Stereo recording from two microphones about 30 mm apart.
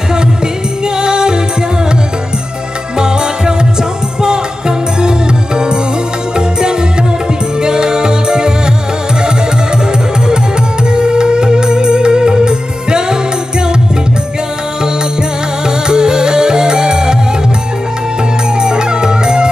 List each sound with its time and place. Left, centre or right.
0.9 s music: right
3.0 s music: right
6.3 s music: right
10.9 s music: right
15.6 s music: right
18.6 s music: right